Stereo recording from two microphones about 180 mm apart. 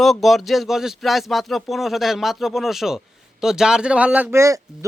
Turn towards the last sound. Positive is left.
turn(degrees=-15)  # may be behind; listen again after turning